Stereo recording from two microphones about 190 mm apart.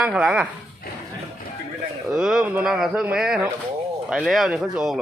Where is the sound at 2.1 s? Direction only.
5° right (ahead or behind).